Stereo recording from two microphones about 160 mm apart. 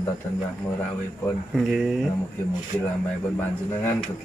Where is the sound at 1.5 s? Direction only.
Centre (ahead or behind).